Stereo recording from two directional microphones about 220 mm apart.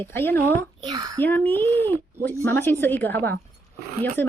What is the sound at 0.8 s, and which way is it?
Speech, 20° right (ahead or behind).